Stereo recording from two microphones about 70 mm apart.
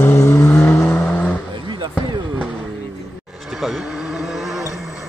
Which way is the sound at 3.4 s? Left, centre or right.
Centre.